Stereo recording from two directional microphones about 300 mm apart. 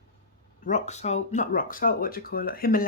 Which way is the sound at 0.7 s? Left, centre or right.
Left.